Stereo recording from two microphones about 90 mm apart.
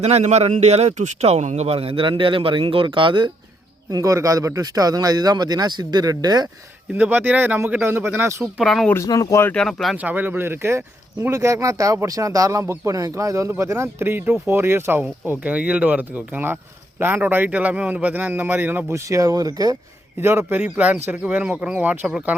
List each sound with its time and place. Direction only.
1.7 s speech: 90° right; by 3.3 s 60° right (ahead or behind)
3.9 s speech: 40° right (ahead or behind)
6.9 s a man's voice: 20° right (ahead or behind)
8.5 s speech: centre (ahead or behind)
9.0 s speech: 40° left (ahead or behind)
9.5 s speech: 5° left (ahead or behind)
10.0 s a man's voice: 20° right (ahead or behind); by 19.7 s 45° right (ahead or behind)
20.2 s a man's voice: 25° right (ahead or behind)
20.6 s speech: 15° right (ahead or behind)